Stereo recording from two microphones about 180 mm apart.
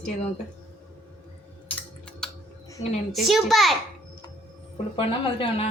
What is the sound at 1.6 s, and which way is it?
Typing, 5° left (ahead or behind).